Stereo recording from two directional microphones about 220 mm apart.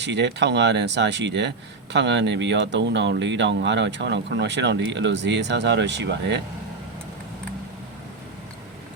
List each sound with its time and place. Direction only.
0.0 s speech: 55° right (ahead or behind)